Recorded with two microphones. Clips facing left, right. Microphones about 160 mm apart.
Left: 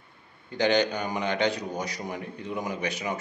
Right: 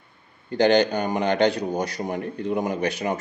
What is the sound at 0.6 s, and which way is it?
Speech, 35° right (ahead or behind).